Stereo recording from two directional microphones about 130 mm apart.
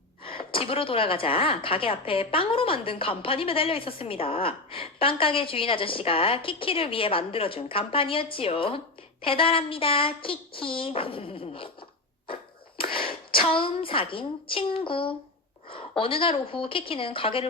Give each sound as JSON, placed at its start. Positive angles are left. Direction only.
{"t": 0.3, "sound": "a woman's voice", "side_deg": 45}
{"t": 12.3, "sound": "a sound", "side_deg": 45}
{"t": 15.7, "sound": "a woman's voice", "side_deg": 45}